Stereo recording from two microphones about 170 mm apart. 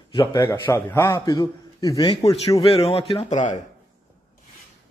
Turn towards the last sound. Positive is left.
turn(degrees=40)  # may be behind; listen again after turning